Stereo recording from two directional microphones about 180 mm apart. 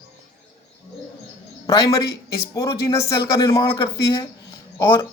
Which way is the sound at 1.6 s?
20° left (ahead or behind).